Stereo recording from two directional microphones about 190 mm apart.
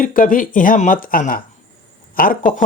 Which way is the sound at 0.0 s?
45° left (ahead or behind).